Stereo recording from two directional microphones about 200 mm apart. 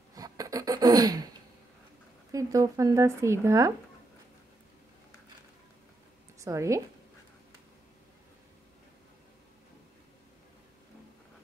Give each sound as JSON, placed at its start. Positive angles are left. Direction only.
{"t": 0.1, "sound": "a sound", "side_deg": -20}
{"t": 2.3, "sound": "speech", "side_deg": -15}
{"t": 6.4, "sound": "speech", "side_deg": -15}